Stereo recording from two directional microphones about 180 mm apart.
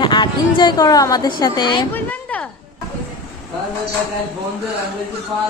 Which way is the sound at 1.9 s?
10° left (ahead or behind).